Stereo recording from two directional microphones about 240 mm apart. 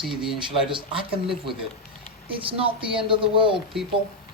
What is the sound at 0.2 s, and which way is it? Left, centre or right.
Speech, centre.